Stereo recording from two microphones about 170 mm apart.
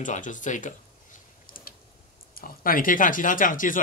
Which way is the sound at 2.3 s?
55° left (ahead or behind).